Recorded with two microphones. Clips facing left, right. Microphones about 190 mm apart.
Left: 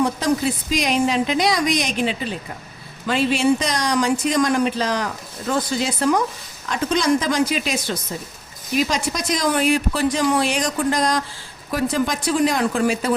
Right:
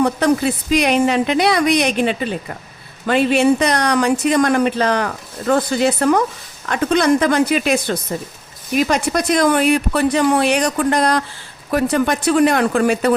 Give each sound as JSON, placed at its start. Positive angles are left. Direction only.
{"t": 0.0, "sound": "speech", "side_deg": -60}